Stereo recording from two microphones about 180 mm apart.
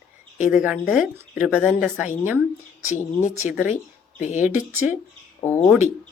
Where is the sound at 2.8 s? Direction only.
40° left (ahead or behind).